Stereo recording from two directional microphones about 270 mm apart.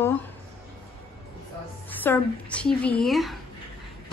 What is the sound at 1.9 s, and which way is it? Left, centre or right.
Speech, centre.